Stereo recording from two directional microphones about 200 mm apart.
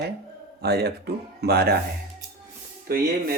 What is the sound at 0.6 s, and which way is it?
Speech, 55° right (ahead or behind).